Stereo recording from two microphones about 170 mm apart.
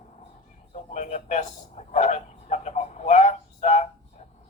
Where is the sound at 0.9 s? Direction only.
45° left (ahead or behind).